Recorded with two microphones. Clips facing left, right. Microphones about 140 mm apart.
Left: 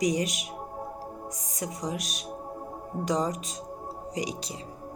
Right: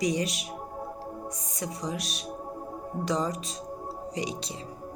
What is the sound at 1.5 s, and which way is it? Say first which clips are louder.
Music: left 1 dB; 30° right (ahead or behind).